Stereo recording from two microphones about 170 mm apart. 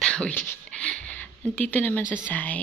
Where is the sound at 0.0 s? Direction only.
5° left (ahead or behind).